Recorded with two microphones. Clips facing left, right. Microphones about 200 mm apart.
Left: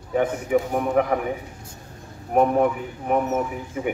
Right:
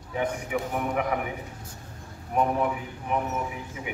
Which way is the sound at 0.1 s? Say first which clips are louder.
Left 8 dB; 45° left (ahead or behind).